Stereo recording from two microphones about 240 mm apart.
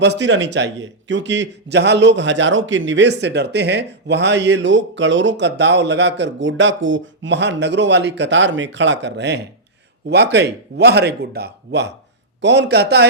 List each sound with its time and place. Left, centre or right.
0.0 s a man's voice: right